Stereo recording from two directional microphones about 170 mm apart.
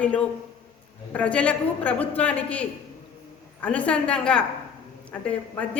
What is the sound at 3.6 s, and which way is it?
Speech, 10° left (ahead or behind).